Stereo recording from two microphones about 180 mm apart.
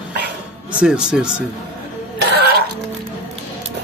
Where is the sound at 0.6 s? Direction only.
5° right (ahead or behind).